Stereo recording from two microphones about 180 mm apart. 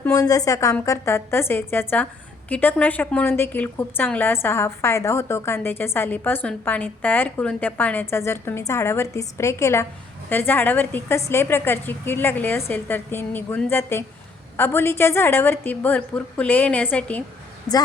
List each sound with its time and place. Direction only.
0.0 s a woman's voice: 20° left (ahead or behind); by 17.8 s 5° left (ahead or behind)